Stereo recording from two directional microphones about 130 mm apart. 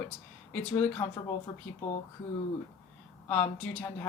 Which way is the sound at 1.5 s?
20° left (ahead or behind).